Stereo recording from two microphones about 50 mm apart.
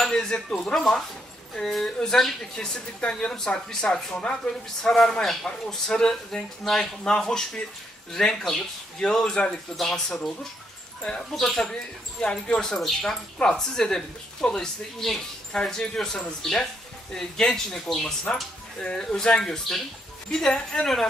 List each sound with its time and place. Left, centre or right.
0.0 s speech: centre